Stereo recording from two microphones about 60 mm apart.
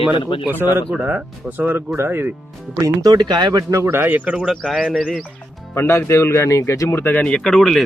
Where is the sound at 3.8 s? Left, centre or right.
Right.